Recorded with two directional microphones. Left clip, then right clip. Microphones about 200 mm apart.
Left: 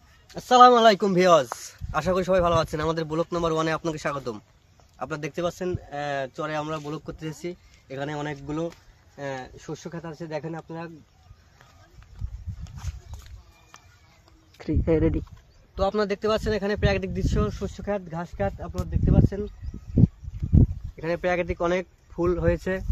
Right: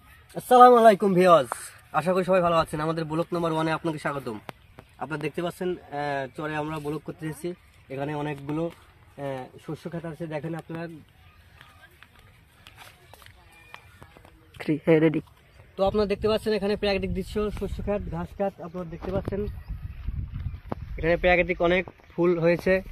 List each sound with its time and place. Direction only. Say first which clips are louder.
0.3 s speech: even; 30° right (ahead or behind)
0.7 s speech: right 1 dB; 10° right (ahead or behind)
1.1 s speech: even; 20° left (ahead or behind)
6.9 s speech: right 1 dB; 5° left (ahead or behind)
9.1 s speech: even; 20° right (ahead or behind); by 10.9 s 40° right (ahead or behind)
14.6 s speech: right 3 dB; centre (ahead or behind)
15.7 s speech: right 1 dB; 15° right (ahead or behind)
20.9 s speech: right 5 dB; 45° right (ahead or behind)